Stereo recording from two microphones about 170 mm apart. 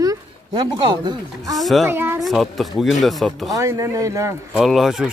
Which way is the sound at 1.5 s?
Centre (ahead or behind).